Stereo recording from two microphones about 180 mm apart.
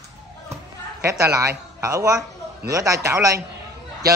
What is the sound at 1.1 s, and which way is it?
A woman's voice, 15° right (ahead or behind).